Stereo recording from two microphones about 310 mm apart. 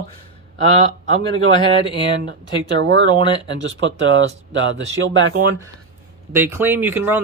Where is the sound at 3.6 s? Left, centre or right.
Right.